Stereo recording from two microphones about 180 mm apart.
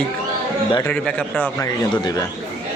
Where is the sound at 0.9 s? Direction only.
5° left (ahead or behind).